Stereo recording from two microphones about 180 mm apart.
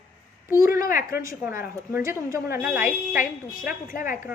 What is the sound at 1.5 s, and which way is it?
A woman's voice, 15° right (ahead or behind).